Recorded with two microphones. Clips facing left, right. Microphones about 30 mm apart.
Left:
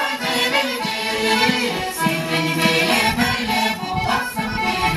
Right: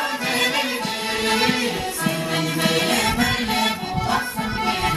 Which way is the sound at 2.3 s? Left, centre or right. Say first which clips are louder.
Left 2 dB; left.